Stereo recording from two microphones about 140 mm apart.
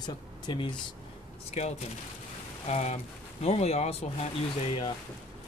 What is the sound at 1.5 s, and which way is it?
Speech, 50° left (ahead or behind).